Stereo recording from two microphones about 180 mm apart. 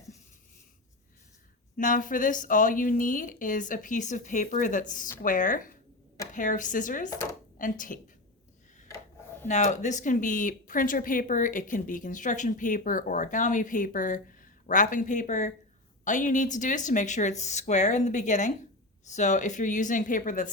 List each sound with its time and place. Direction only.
1.7 s speech: 45° left (ahead or behind)
9.5 s speech: 40° left (ahead or behind)